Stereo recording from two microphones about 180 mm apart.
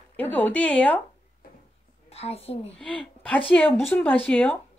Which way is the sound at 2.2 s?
35° left (ahead or behind).